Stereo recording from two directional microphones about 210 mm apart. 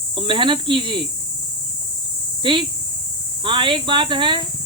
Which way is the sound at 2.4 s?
25° right (ahead or behind).